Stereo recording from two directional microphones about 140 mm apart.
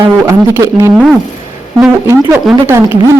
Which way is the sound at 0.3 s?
20° right (ahead or behind).